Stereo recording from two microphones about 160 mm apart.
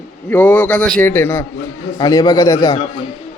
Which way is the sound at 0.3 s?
10° left (ahead or behind).